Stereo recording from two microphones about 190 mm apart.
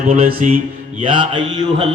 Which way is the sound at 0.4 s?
40° right (ahead or behind).